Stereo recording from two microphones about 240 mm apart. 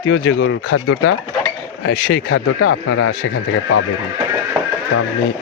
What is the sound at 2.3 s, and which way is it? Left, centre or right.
Speech, left.